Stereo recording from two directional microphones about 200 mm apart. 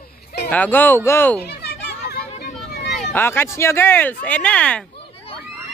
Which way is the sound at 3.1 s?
10° left (ahead or behind).